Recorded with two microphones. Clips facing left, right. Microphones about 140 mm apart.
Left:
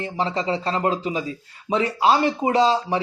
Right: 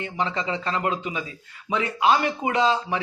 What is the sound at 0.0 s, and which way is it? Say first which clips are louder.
A man's voice: left 3 dB; 35° left (ahead or behind).